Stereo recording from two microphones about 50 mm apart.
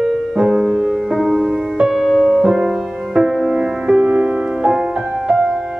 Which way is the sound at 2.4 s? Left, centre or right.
Centre.